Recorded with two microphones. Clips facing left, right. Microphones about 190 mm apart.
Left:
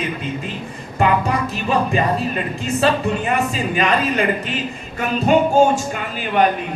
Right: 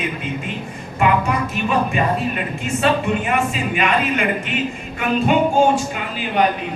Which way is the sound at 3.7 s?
35° left (ahead or behind).